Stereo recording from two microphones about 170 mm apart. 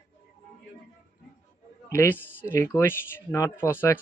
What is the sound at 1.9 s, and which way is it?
Speech, 15° left (ahead or behind).